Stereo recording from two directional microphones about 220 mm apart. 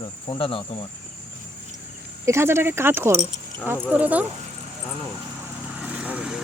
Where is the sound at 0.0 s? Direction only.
25° left (ahead or behind).